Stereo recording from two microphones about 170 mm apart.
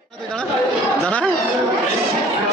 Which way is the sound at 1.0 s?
5° left (ahead or behind).